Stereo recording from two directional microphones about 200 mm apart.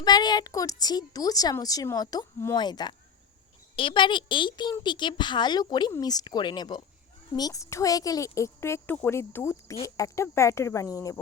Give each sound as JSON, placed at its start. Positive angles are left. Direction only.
{"t": 0.0, "sound": "a woman's voice", "side_deg": 20}